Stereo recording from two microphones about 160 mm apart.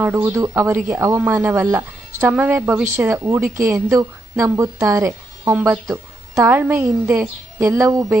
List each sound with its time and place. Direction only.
0.0 s a woman's voice: 15° right (ahead or behind)